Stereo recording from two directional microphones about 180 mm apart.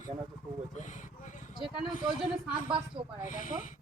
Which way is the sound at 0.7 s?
40° left (ahead or behind).